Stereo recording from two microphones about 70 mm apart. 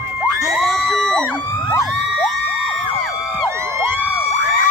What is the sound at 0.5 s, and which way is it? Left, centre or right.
Crowd, centre.